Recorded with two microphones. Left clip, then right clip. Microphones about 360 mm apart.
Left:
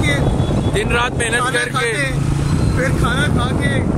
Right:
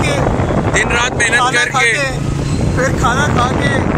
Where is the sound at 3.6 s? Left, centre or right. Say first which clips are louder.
Right 4 dB; right.